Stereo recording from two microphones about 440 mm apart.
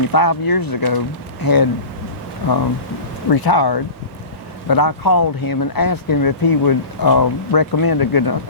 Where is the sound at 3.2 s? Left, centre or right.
Left.